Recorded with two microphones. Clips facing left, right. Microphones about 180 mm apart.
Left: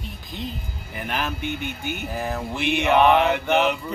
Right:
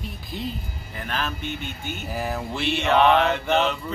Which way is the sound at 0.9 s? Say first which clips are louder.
Left 2 dB; 15° left (ahead or behind).